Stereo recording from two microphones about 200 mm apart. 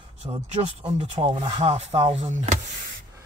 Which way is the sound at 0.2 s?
25° right (ahead or behind).